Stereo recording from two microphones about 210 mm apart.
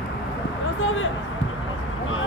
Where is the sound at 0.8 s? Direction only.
70° left (ahead or behind).